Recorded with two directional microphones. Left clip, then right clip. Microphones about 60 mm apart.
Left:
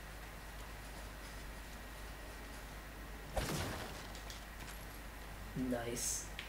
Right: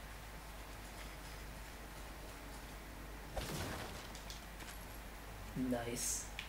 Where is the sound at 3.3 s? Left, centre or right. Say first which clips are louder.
Left 3 dB; centre.